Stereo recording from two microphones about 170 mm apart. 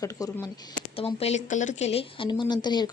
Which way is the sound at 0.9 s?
35° left (ahead or behind).